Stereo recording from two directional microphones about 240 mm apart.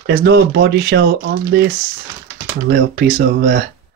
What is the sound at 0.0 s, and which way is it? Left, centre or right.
Speech, right.